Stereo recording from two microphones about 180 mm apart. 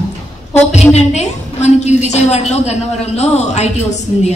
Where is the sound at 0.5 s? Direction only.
40° left (ahead or behind).